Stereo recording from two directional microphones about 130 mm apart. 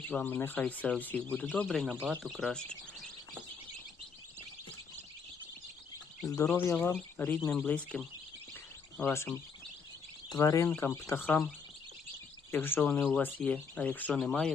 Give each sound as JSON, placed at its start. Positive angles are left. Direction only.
{"t": 0.1, "sound": "speech", "side_deg": 10}
{"t": 6.4, "sound": "speech", "side_deg": 15}
{"t": 9.0, "sound": "speech", "side_deg": 20}